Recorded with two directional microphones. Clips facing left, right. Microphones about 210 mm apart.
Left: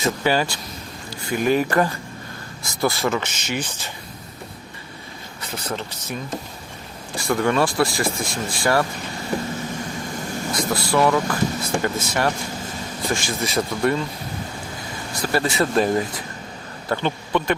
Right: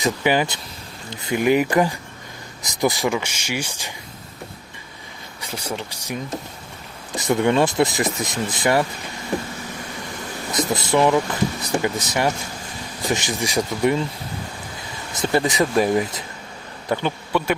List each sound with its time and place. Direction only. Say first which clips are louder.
0.0 s speech: right 1 dB; 15° right (ahead or behind)
5.4 s speech: even; 10° right (ahead or behind)
7.2 s speech: right 2 dB; 20° right (ahead or behind)
10.5 s speech: right 2 dB; 20° right (ahead or behind)
15.1 s speech: right 2 dB; 20° right (ahead or behind)